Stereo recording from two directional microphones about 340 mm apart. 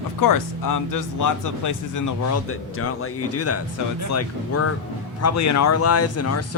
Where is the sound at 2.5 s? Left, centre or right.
Left.